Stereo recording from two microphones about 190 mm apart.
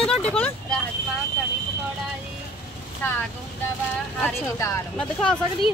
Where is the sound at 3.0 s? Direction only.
10° left (ahead or behind).